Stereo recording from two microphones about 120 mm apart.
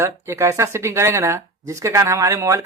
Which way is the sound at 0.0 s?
25° right (ahead or behind).